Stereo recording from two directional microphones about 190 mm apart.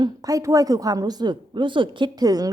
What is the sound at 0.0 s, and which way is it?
A woman's voice, 20° right (ahead or behind).